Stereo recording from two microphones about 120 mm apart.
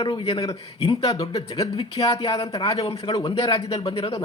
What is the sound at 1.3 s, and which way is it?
A man's voice, 35° left (ahead or behind).